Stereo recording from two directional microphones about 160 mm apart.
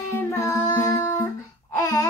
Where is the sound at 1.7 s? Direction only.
20° left (ahead or behind).